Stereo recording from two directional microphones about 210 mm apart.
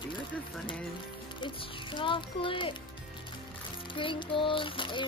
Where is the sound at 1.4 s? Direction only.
20° left (ahead or behind).